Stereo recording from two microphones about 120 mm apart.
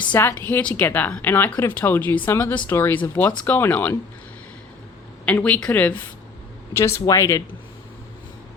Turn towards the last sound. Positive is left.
turn(degrees=25)  # may be behind; listen again after turning